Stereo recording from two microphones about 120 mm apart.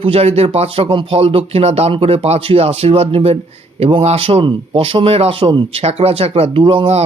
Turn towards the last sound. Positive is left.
turn(degrees=-50)  # may be behind; listen again after turning